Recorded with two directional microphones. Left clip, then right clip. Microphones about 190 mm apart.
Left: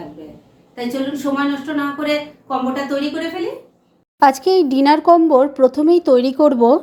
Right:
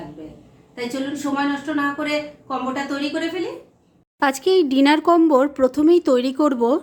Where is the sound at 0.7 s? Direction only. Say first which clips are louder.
Left 4 dB; 5° left (ahead or behind).